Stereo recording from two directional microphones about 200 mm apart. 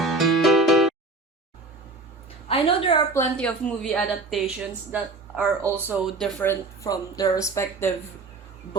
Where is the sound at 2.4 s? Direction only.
25° left (ahead or behind).